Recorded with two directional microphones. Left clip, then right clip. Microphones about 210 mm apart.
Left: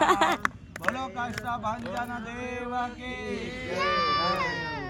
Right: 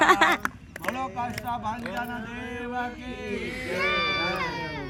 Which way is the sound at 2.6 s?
20° left (ahead or behind).